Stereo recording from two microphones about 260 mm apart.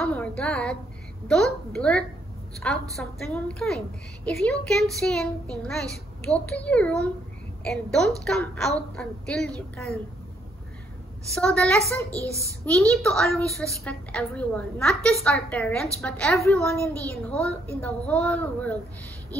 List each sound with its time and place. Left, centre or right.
0.0 s a sound: centre
1.2 s a woman's voice: centre
11.3 s a woman's voice: centre
12.1 s a child's voice: centre
12.6 s a woman's voice: centre